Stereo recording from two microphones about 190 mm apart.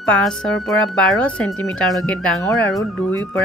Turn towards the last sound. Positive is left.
turn(degrees=5)  # may be behind; listen again after turning